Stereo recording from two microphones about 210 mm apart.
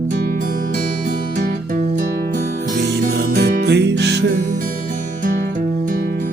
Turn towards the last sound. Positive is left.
turn(degrees=-45)  # may be behind; listen again after turning